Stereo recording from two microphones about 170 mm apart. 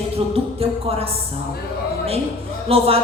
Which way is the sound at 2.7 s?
35° right (ahead or behind).